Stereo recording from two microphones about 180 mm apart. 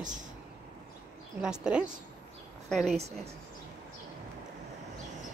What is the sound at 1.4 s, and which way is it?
A woman's voice, 5° right (ahead or behind).